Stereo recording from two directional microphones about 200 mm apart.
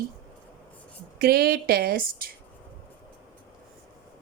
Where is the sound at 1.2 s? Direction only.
50° right (ahead or behind).